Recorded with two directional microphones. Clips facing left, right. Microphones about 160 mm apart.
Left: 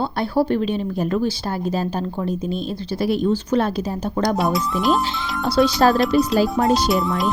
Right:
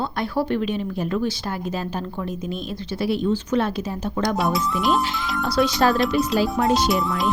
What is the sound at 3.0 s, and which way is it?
Speech, 40° left (ahead or behind).